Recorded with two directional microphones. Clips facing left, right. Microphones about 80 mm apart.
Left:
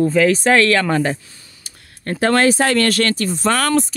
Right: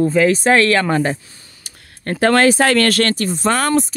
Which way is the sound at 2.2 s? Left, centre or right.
Right.